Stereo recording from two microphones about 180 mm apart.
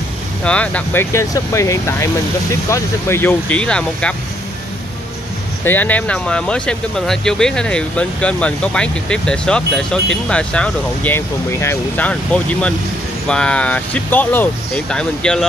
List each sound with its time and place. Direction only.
0.4 s speech: 5° left (ahead or behind)
5.6 s speech: 10° left (ahead or behind)